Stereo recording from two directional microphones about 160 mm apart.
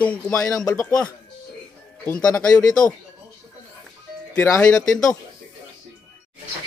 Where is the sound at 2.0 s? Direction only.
10° left (ahead or behind).